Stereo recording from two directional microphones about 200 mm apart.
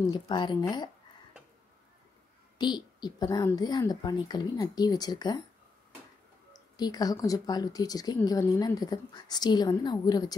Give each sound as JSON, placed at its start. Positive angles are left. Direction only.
{"t": 0.1, "sound": "speech", "side_deg": 25}
{"t": 2.6, "sound": "speech", "side_deg": 20}
{"t": 6.5, "sound": "speech", "side_deg": 20}